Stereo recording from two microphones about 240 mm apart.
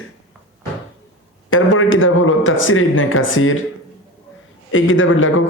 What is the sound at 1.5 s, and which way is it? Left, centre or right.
Speech, left.